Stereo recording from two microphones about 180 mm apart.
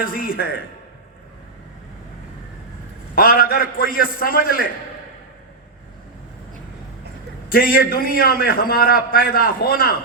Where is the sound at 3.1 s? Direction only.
55° left (ahead or behind).